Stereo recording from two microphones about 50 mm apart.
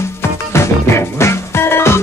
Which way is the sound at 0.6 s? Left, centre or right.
Left.